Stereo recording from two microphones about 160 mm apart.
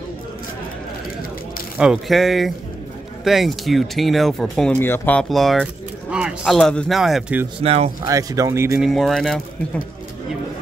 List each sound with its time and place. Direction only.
1.8 s speech: centre (ahead or behind)
4.7 s speech: 15° left (ahead or behind)
7.6 s speech: 40° right (ahead or behind)
8.0 s speech: 20° right (ahead or behind)
8.8 s speech: centre (ahead or behind)